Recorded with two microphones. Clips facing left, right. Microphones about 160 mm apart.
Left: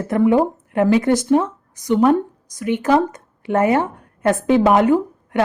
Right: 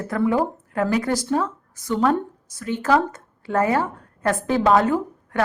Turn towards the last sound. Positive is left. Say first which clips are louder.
# left 6 dB
turn(degrees=20)  # may be behind; listen again after turning